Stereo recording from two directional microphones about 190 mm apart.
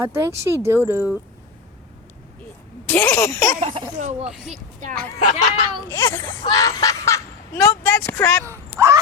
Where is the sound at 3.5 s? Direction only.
35° right (ahead or behind).